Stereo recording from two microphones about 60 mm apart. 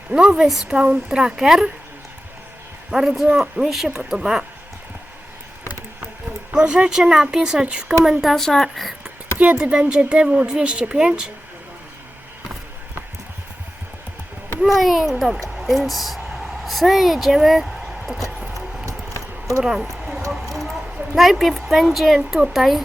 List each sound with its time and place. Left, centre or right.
0.1 s speech: centre
2.9 s speech: centre
6.5 s speech: centre
8.2 s a child's voice: centre
9.6 s speech: centre
14.6 s a child's voice: centre
15.5 s a sound: centre
19.6 s speech: centre
19.9 s a sound: centre
22.4 s a child's voice: centre